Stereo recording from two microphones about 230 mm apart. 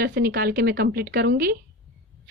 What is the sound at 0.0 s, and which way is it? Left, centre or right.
A woman's voice, right.